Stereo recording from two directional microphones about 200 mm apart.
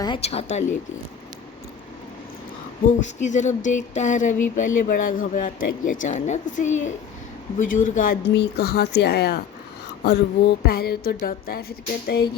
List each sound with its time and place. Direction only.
0.0 s speech: 25° left (ahead or behind)
2.8 s speech: 35° left (ahead or behind)
8.2 s a woman's voice: 60° left (ahead or behind)